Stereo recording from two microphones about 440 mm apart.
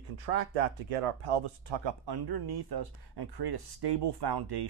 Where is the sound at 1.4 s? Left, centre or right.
Right.